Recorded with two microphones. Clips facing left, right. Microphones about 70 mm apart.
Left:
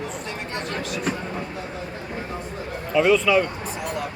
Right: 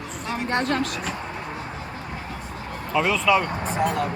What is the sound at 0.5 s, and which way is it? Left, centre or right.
Speech, right.